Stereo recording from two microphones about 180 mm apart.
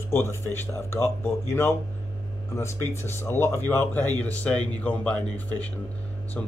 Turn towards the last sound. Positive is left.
turn(degrees=10)  # may be behind; listen again after turning